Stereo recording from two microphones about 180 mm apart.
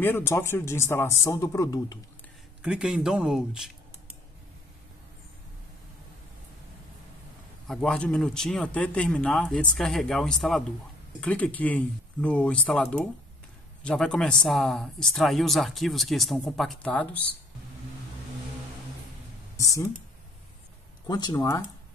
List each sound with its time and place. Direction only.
0.0 s speech: 15° left (ahead or behind)
2.6 s speech: 5° right (ahead or behind)
7.6 s speech: centre (ahead or behind)
19.5 s speech: 20° left (ahead or behind)
21.1 s speech: 20° left (ahead or behind)